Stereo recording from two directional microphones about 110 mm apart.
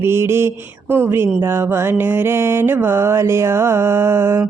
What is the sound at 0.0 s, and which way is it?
Mantra, 25° right (ahead or behind).